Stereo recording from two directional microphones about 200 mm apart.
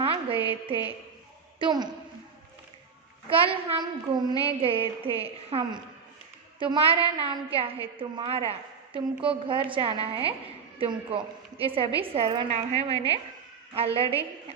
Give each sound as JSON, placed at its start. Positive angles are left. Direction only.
{"t": 0.0, "sound": "music", "side_deg": -30}
{"t": 1.5, "sound": "a woman's voice", "side_deg": -20}
{"t": 3.2, "sound": "a woman's voice", "side_deg": -25}